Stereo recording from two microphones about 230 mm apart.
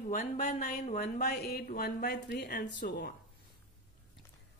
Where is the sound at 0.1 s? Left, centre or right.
Left.